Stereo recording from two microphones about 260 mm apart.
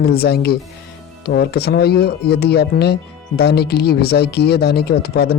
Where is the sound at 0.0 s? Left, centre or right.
Left.